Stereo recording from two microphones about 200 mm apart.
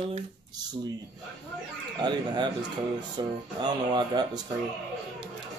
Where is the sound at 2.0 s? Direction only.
20° right (ahead or behind).